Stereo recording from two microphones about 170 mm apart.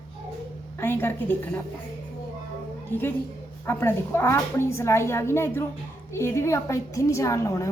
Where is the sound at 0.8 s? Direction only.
10° left (ahead or behind).